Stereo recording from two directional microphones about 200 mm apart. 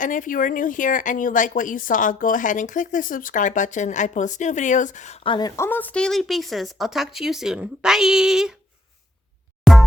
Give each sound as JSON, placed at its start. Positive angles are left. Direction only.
{"t": 0.0, "sound": "speech", "side_deg": 40}
{"t": 9.7, "sound": "music", "side_deg": 0}